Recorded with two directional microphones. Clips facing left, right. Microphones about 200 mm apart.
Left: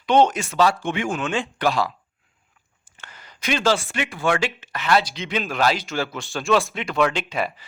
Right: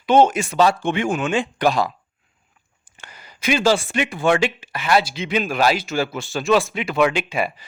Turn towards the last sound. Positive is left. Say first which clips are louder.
# right 3 dB
turn(degrees=-10)  # may be behind; listen again after turning